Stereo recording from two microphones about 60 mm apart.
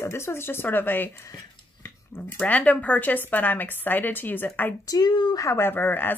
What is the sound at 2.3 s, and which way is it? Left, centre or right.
A woman's voice, left.